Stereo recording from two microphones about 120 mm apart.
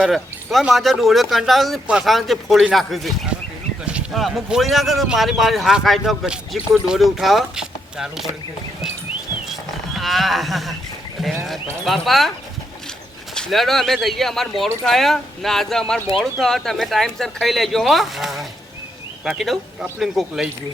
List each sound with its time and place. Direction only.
0.0 s speech: centre (ahead or behind)
9.5 s livestock: centre (ahead or behind)
11.2 s speech: centre (ahead or behind)
13.3 s speech: 5° left (ahead or behind)